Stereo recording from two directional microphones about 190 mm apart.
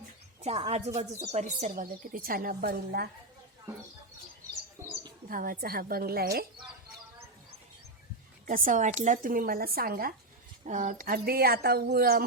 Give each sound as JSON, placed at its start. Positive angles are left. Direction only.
{"t": 0.4, "sound": "a woman's voice", "side_deg": -30}
{"t": 4.8, "sound": "bird", "side_deg": -15}
{"t": 5.3, "sound": "a woman's voice", "side_deg": -50}
{"t": 8.4, "sound": "a woman's voice", "side_deg": -45}